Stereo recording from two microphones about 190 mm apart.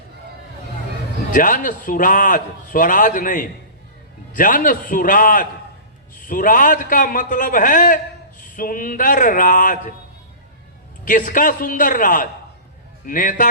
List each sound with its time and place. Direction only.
1.3 s a man's voice: 45° left (ahead or behind)
11.0 s a man's voice: 45° left (ahead or behind)